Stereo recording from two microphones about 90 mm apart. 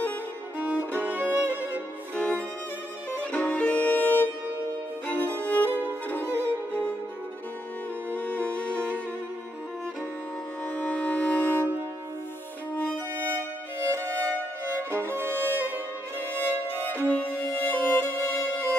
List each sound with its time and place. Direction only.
0.6 s violin: 20° right (ahead or behind)
2.1 s music: 15° left (ahead or behind)
8.1 s music: 20° left (ahead or behind)
10.7 s music: 15° left (ahead or behind)
13.1 s violin: 25° right (ahead or behind)
16.3 s music: 20° left (ahead or behind)